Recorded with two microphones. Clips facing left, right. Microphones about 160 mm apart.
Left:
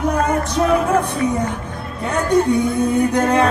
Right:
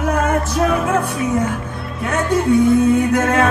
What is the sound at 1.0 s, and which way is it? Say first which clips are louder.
Speech: right 1 dB; 5° right (ahead or behind).